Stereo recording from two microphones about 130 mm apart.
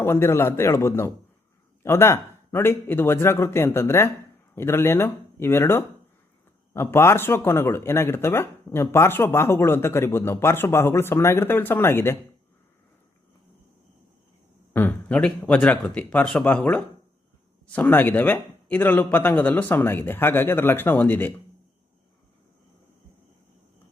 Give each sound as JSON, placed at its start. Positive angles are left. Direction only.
{"t": 0.0, "sound": "speech", "side_deg": 20}
{"t": 14.7, "sound": "speech", "side_deg": 15}